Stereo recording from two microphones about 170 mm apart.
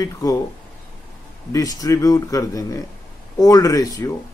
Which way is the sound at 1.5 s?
20° left (ahead or behind).